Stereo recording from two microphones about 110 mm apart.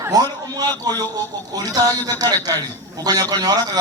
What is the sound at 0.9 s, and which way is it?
A man's voice, 35° right (ahead or behind).